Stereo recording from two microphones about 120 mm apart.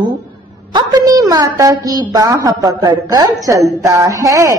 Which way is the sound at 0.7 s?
30° right (ahead or behind).